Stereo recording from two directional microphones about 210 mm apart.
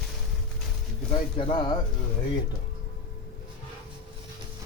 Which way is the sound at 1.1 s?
25° left (ahead or behind).